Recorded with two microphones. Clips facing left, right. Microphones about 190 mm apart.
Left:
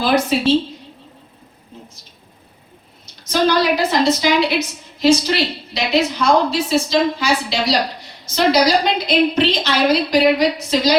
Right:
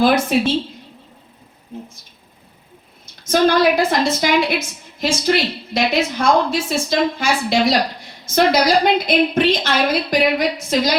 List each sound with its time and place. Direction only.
0.0 s a woman's voice: 50° right (ahead or behind)
1.7 s speech: 50° right (ahead or behind)
3.2 s a woman's voice: 50° right (ahead or behind)